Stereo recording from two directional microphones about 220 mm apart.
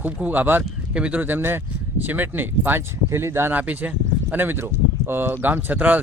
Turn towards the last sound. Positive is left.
turn(degrees=-5)  # may be behind; listen again after turning